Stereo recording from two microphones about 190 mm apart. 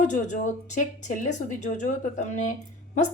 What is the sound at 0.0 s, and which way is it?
A woman's voice, 40° left (ahead or behind).